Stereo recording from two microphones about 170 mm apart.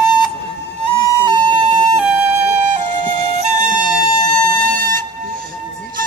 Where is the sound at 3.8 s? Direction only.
55° right (ahead or behind).